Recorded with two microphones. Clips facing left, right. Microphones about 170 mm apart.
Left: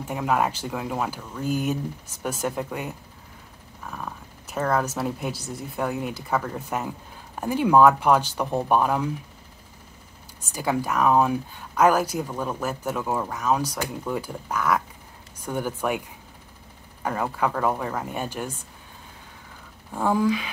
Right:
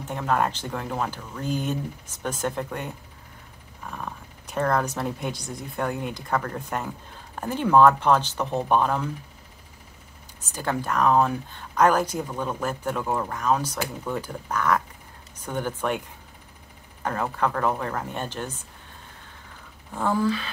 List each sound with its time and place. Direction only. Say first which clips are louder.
0.0 s speech: left 1 dB; 10° left (ahead or behind)
10.5 s speech: left 2 dB; 10° left (ahead or behind)
17.0 s speech: even; 10° left (ahead or behind)
19.9 s speech: left 2 dB; 10° left (ahead or behind)